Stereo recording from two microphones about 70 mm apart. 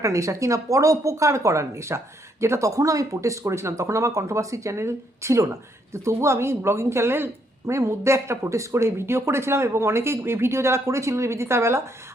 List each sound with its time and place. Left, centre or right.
0.0 s speech: right